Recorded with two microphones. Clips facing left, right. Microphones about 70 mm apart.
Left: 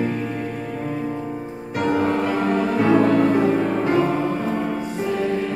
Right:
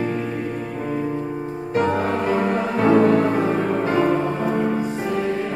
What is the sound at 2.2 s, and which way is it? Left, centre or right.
Music, centre.